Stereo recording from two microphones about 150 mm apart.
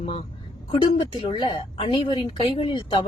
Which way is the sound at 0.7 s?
35° left (ahead or behind).